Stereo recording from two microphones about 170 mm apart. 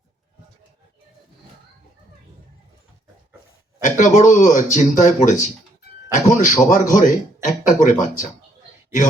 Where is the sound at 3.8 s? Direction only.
45° left (ahead or behind).